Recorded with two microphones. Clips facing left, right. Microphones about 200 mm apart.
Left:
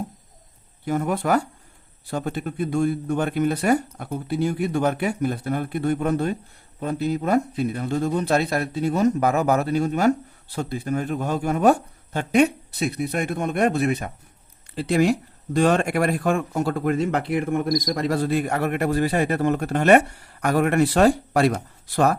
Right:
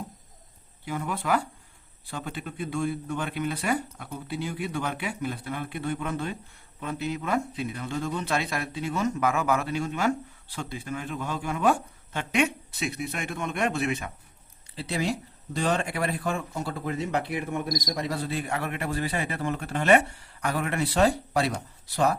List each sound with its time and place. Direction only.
0.9 s speech: 45° left (ahead or behind)